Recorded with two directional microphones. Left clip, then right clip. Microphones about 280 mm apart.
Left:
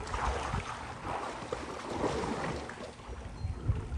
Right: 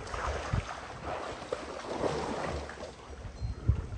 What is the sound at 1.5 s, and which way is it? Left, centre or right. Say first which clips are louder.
Boat: right 1 dB; centre.